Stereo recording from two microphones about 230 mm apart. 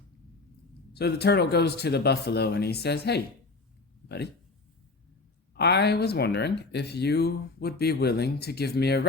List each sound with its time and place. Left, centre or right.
0.9 s speech: left
5.5 s speech: left